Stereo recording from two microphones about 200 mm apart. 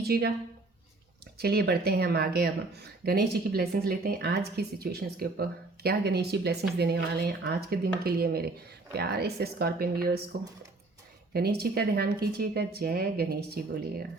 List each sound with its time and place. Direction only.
0.0 s speech: 55° right (ahead or behind)
1.4 s speech: 50° right (ahead or behind)